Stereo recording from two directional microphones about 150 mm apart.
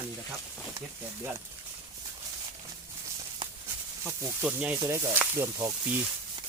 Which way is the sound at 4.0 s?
15° right (ahead or behind).